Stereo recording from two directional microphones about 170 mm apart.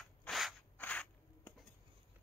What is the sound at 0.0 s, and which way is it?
Rub, centre (ahead or behind).